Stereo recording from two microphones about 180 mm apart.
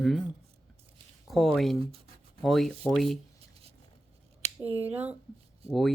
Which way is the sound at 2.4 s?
Centre (ahead or behind).